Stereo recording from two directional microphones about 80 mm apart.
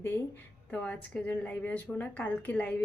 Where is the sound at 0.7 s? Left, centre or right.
Centre.